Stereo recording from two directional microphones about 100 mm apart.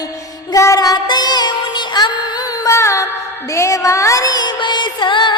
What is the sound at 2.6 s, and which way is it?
Music, 30° left (ahead or behind).